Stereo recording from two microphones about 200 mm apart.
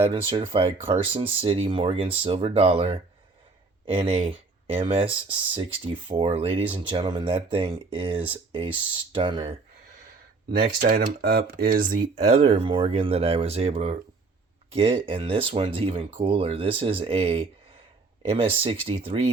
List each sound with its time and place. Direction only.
0.0 s speech: 25° right (ahead or behind)
10.6 s speech: 50° right (ahead or behind); by 19.3 s 30° right (ahead or behind)